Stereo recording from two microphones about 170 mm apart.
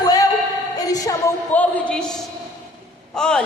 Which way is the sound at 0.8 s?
20° left (ahead or behind).